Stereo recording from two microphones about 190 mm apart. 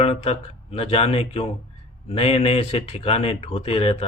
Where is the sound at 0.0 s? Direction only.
30° left (ahead or behind).